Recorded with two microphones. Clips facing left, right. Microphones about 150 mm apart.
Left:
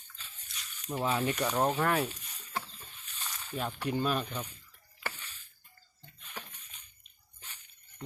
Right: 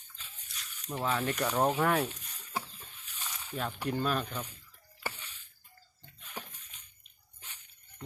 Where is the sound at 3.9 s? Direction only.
5° left (ahead or behind).